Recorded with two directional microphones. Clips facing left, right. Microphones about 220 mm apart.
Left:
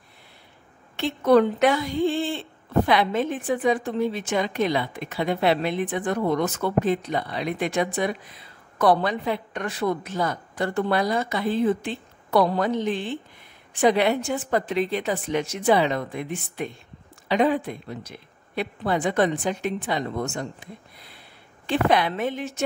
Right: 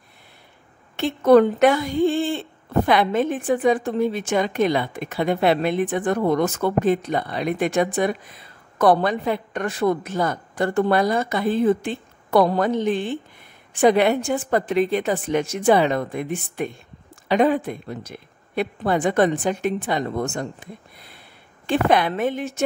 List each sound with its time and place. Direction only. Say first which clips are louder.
0.9 s a woman's voice: right 4 dB; 50° right (ahead or behind)
21.6 s a woman's voice: right 2 dB; 50° right (ahead or behind)